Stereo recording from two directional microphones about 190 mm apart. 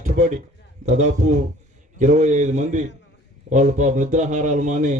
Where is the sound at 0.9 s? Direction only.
40° right (ahead or behind).